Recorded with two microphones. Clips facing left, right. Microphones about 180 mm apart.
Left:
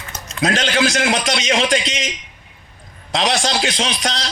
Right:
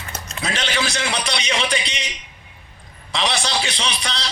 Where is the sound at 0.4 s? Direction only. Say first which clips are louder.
Left 7 dB; 45° left (ahead or behind).